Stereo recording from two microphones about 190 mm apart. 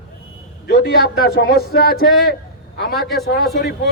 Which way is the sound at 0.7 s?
55° left (ahead or behind).